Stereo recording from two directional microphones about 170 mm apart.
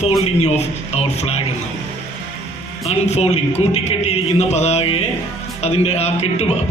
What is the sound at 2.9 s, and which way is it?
A man's voice, 40° left (ahead or behind).